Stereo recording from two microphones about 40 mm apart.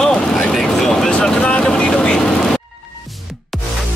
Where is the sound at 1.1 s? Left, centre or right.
Centre.